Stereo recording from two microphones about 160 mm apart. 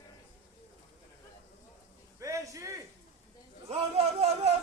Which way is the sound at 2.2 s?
20° right (ahead or behind).